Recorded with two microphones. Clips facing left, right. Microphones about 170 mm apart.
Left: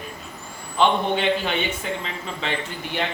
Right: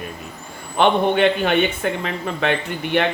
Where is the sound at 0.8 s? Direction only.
60° right (ahead or behind).